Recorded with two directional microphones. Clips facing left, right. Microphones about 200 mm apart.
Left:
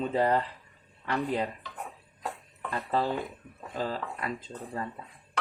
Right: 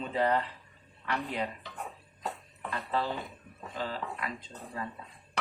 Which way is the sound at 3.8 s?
40° left (ahead or behind).